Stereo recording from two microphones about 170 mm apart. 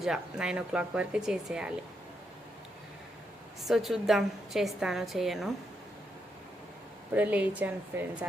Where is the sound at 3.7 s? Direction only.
Centre (ahead or behind).